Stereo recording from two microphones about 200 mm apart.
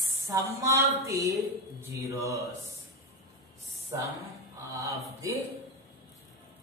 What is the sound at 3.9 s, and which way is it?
Speech, 20° right (ahead or behind).